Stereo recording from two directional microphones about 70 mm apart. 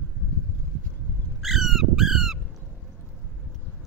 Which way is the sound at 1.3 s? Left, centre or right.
Centre.